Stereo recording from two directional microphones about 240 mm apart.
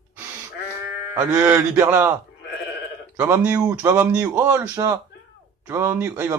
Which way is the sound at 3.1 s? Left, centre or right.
Centre.